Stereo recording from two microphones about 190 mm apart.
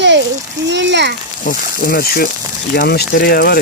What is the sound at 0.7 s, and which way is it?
Speech, 65° right (ahead or behind).